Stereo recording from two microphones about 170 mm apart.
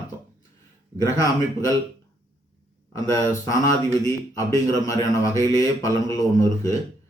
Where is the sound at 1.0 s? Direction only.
20° left (ahead or behind).